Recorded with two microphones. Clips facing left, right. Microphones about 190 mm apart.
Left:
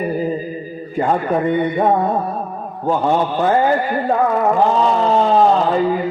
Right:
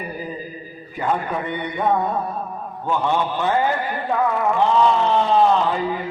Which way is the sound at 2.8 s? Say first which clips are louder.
Left 5 dB; 40° left (ahead or behind).